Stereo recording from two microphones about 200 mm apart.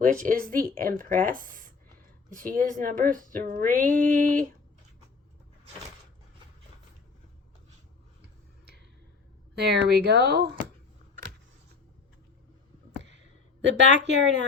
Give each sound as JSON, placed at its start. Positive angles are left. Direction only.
{"t": 0.0, "sound": "a woman's voice", "side_deg": -45}
{"t": 9.6, "sound": "speech", "side_deg": -55}
{"t": 13.0, "sound": "a sound", "side_deg": -60}